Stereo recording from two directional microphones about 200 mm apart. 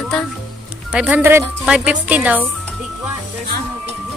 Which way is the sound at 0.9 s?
5° right (ahead or behind).